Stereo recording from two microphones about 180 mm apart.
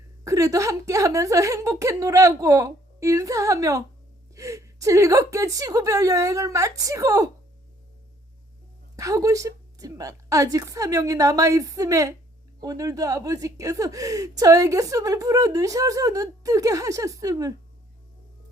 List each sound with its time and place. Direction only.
0.3 s a woman's voice: 20° right (ahead or behind)
9.0 s speech: 20° right (ahead or behind)